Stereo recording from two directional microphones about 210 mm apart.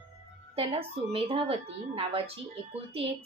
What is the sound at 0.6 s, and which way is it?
A woman's voice, 25° right (ahead or behind).